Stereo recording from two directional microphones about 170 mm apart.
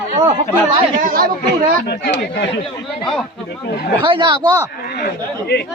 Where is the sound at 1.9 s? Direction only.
75° left (ahead or behind).